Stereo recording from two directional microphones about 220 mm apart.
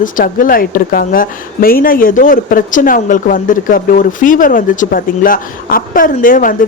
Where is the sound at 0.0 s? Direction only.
40° left (ahead or behind).